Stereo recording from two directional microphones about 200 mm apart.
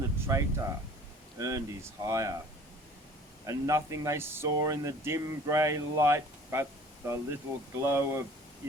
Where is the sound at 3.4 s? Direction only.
15° right (ahead or behind).